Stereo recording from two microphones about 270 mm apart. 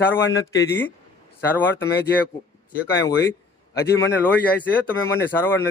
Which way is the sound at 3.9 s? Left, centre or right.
Centre.